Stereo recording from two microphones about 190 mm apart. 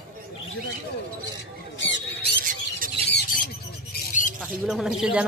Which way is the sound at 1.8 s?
70° left (ahead or behind).